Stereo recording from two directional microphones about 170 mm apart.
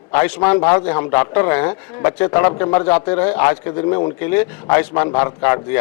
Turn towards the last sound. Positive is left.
turn(degrees=15)  # may be behind; listen again after turning